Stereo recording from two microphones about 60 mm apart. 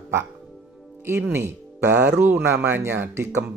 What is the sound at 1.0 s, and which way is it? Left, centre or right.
Speech, right.